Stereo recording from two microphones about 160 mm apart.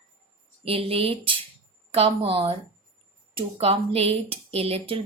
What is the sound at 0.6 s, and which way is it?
Speech, 35° right (ahead or behind).